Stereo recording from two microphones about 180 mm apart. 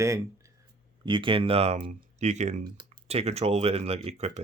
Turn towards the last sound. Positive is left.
turn(degrees=-35)  # may be behind; listen again after turning